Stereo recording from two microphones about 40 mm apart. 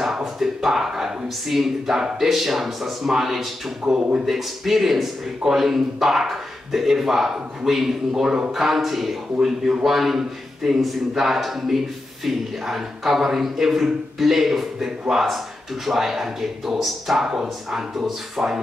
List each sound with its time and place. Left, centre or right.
0.0 s speech: centre
3.8 s speech: centre
4.3 s speech: centre
8.5 s speech: centre